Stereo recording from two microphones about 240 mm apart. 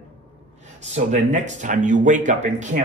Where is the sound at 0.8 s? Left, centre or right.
Right.